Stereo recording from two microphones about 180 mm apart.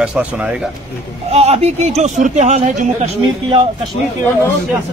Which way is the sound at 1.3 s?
35° right (ahead or behind).